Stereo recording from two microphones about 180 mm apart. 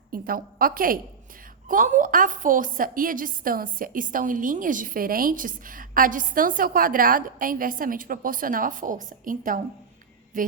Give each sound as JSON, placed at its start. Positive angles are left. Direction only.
{"t": 0.1, "sound": "a woman's voice", "side_deg": -55}